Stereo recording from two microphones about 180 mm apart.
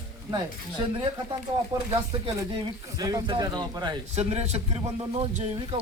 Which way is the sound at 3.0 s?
20° right (ahead or behind).